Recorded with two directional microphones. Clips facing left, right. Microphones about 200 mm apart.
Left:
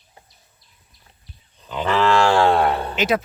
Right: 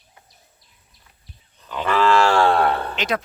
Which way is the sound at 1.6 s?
15° left (ahead or behind).